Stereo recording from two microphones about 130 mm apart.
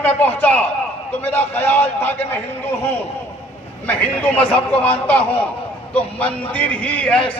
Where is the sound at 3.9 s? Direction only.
15° left (ahead or behind).